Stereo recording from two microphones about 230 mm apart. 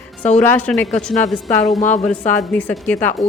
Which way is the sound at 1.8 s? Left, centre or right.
Left.